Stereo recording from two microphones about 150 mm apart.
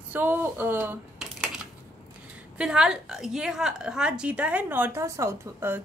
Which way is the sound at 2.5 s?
5° right (ahead or behind).